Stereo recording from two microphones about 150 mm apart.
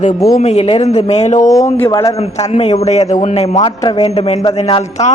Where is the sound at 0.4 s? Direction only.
45° left (ahead or behind).